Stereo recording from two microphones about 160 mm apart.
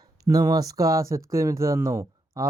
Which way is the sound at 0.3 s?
25° right (ahead or behind).